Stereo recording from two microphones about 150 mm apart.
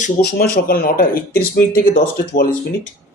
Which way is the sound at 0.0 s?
85° left.